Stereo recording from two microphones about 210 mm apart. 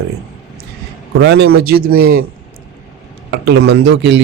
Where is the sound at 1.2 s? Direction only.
55° right (ahead or behind).